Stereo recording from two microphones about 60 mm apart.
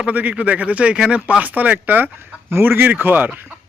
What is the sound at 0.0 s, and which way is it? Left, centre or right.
Speech, right.